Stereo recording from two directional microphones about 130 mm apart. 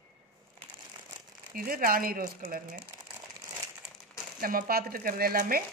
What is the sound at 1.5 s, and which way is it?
Speech, 90° right.